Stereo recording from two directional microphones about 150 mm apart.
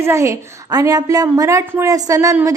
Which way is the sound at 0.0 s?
20° right (ahead or behind).